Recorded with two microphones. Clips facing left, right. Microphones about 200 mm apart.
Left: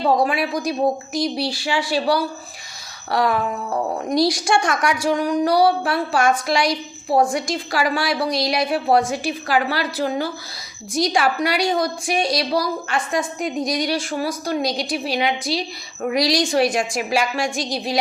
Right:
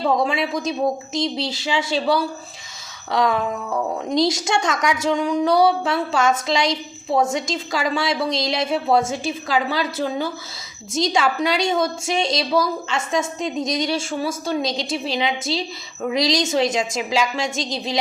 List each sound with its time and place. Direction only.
0.3 s a woman's voice: 25° right (ahead or behind)